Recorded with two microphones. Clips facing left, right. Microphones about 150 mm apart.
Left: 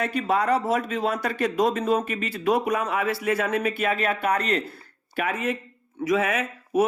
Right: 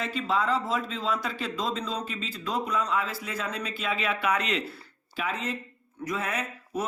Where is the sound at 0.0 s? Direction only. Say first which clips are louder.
Left 4 dB; 60° left (ahead or behind).